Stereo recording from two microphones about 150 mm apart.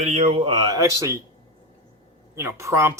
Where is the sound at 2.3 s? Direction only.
20° right (ahead or behind).